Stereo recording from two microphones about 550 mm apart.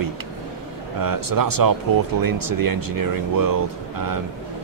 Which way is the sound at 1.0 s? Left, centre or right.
Right.